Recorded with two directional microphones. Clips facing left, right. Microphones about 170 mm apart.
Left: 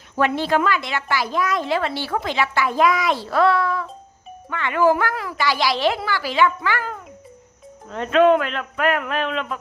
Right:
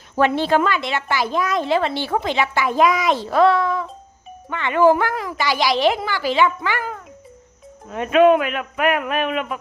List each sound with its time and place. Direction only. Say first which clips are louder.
0.2 s a woman's voice: right 2 dB; 25° right (ahead or behind)